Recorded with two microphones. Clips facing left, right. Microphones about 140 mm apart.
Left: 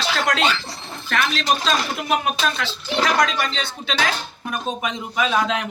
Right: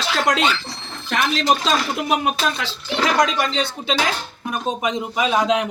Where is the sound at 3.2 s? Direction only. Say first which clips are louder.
Right 3 dB; 20° right (ahead or behind).